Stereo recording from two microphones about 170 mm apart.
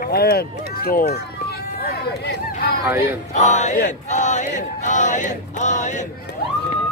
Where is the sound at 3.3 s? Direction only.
45° left (ahead or behind).